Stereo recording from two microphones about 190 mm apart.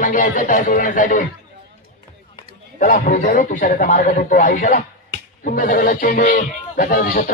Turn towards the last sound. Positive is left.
turn(degrees=45)  # may be behind; listen again after turning